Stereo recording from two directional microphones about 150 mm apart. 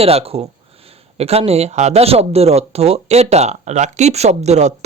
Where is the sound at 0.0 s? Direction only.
40° right (ahead or behind).